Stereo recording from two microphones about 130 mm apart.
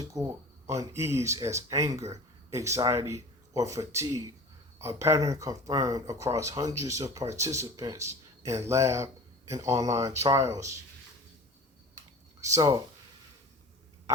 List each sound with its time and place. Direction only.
0.0 s speech: 25° right (ahead or behind)
12.4 s speech: 25° right (ahead or behind)